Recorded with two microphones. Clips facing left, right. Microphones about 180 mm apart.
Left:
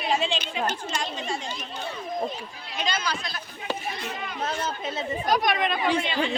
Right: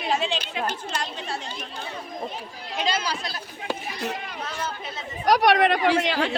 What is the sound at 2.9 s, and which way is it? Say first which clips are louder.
Speech: right 2 dB; 30° right (ahead or behind).